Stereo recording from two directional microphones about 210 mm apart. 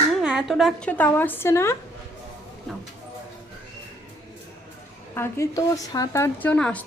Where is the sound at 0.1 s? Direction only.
5° right (ahead or behind); by 1.7 s 15° left (ahead or behind).